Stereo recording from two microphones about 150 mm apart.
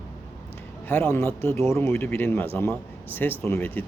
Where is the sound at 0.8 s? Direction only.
15° left (ahead or behind).